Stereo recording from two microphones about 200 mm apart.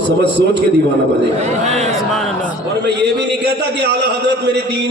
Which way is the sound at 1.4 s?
35° right (ahead or behind).